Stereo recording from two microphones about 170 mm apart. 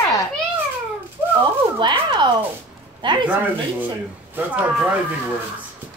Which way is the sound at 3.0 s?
25° right (ahead or behind).